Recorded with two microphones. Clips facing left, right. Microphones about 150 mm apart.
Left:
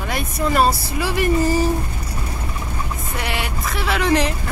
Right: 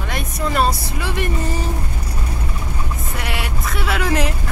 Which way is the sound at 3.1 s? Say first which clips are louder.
Left 2 dB; centre (ahead or behind).